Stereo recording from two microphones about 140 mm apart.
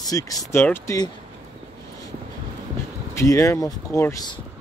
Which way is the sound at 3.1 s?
20° left (ahead or behind).